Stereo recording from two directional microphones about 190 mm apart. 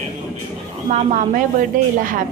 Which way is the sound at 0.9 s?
35° right (ahead or behind).